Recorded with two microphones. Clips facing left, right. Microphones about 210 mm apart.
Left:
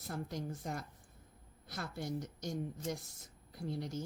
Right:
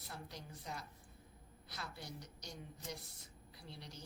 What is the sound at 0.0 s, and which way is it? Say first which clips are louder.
Speech: left 10 dB; 45° left (ahead or behind).